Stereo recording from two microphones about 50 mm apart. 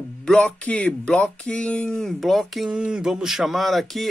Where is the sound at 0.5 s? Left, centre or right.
Left; by 2.1 s centre.